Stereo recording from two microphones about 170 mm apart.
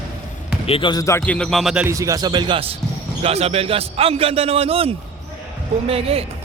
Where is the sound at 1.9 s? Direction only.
20° right (ahead or behind); by 6.2 s 35° right (ahead or behind).